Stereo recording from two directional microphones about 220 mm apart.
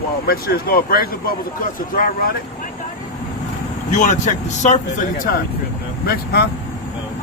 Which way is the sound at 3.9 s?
35° left (ahead or behind).